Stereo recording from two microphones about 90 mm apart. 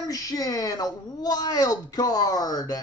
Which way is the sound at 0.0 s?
40° left (ahead or behind).